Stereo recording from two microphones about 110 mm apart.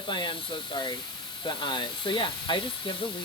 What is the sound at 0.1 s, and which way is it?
Speech, 45° left (ahead or behind).